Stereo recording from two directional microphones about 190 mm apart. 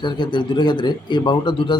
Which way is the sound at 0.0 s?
25° left (ahead or behind).